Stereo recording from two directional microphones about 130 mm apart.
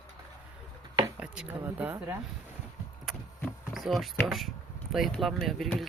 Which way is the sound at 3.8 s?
Centre (ahead or behind).